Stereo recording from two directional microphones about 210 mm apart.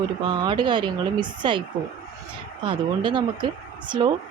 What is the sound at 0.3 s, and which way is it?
Speech, 20° right (ahead or behind).